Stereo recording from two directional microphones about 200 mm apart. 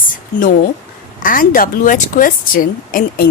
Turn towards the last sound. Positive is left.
turn(degrees=45)  # may be behind; listen again after turning